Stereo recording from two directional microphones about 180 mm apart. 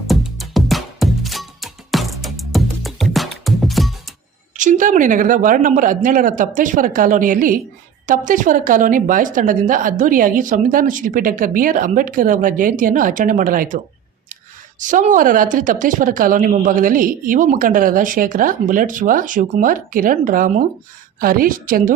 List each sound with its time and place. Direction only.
0.1 s music: centre (ahead or behind)
4.5 s speech: 45° right (ahead or behind)